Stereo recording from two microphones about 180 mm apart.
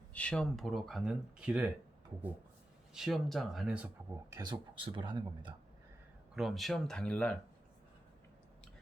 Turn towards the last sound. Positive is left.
turn(degrees=5)  # may be behind; listen again after turning